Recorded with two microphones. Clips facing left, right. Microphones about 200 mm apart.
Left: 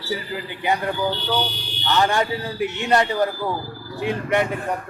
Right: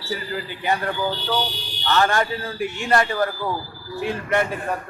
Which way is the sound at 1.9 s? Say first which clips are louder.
Even; 15° left (ahead or behind).